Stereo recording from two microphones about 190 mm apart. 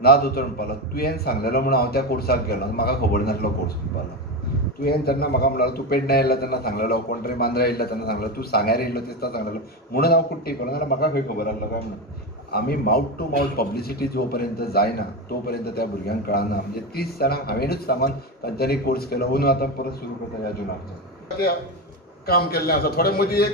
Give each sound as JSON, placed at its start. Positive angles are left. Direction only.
{"t": 0.0, "sound": "a man's voice", "side_deg": 55}
{"t": 4.8, "sound": "a man's voice", "side_deg": 55}
{"t": 22.2, "sound": "a man's voice", "side_deg": 55}